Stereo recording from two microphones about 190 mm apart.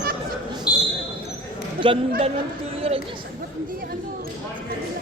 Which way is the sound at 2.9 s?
30° right (ahead or behind).